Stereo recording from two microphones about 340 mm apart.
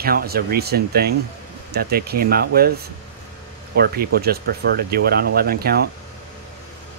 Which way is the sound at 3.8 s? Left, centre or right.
Right.